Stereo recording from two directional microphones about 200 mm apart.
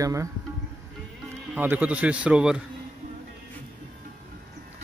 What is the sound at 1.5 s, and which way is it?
A man's voice, 10° right (ahead or behind).